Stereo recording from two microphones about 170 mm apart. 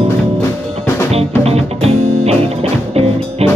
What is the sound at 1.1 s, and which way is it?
Music, 35° right (ahead or behind).